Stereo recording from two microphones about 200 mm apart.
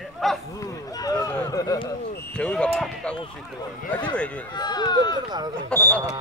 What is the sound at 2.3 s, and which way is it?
Speech, 5° left (ahead or behind).